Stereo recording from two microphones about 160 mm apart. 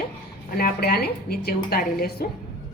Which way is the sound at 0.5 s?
70° left (ahead or behind).